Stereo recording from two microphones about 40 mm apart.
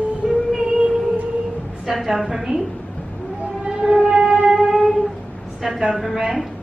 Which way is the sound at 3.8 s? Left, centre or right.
Centre.